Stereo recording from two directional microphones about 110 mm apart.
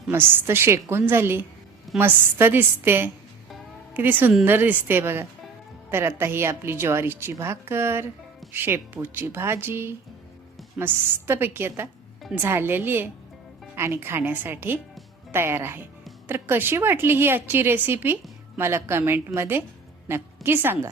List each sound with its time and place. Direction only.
0.1 s a woman's voice: 20° right (ahead or behind)